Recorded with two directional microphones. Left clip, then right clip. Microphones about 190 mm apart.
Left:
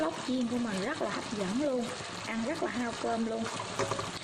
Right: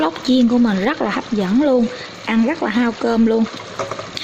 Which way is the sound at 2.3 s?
55° right (ahead or behind).